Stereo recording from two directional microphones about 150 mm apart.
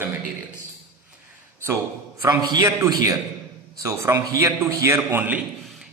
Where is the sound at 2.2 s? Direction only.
25° right (ahead or behind).